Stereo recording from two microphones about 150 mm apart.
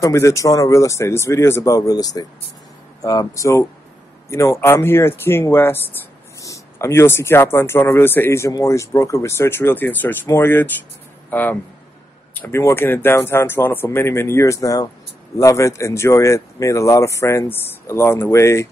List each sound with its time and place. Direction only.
0.0 s a man's voice: 20° left (ahead or behind)